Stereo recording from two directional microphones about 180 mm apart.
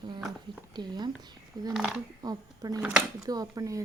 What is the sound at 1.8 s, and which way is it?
Speech, centre (ahead or behind).